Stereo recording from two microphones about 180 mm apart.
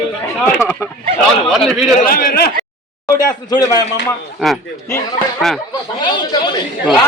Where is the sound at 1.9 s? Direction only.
50° left (ahead or behind).